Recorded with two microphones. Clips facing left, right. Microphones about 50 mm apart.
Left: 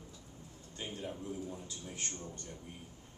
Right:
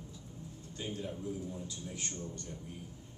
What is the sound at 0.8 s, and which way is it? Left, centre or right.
A man's voice, left.